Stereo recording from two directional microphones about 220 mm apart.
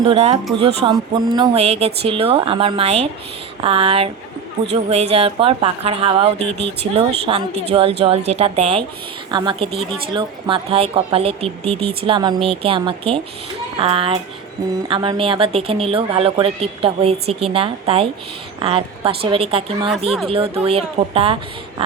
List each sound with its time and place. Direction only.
0.0 s speech: 25° right (ahead or behind)
21.8 s pig: 25° right (ahead or behind)